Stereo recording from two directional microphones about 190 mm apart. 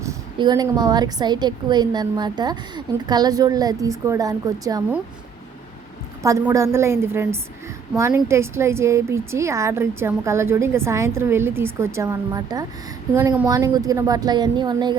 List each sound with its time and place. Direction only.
0.0 s a woman's voice: 20° right (ahead or behind)
6.2 s a woman's voice: 15° right (ahead or behind)